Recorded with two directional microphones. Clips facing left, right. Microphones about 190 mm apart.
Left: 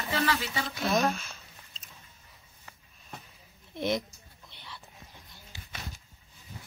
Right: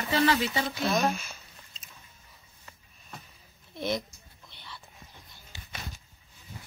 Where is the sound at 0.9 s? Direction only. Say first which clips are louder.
Left 2 dB; 5° right (ahead or behind).